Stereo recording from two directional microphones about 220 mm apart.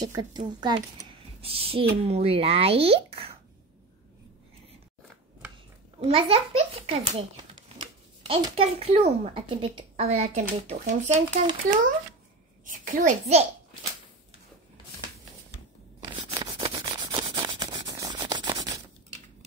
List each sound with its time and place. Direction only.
0.0 s a child's voice: 20° right (ahead or behind)
5.9 s a child's voice: 25° right (ahead or behind)
16.0 s rub: 20° right (ahead or behind)